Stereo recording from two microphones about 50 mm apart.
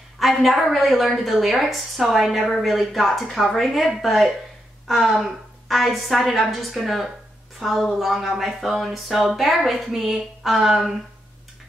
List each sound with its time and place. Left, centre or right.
0.2 s speech: centre